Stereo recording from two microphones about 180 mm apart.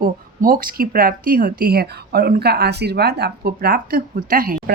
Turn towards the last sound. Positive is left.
turn(degrees=-50)  # may be behind; listen again after turning